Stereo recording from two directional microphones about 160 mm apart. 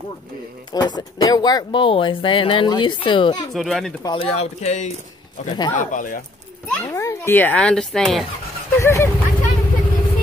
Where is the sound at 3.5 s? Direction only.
Centre (ahead or behind).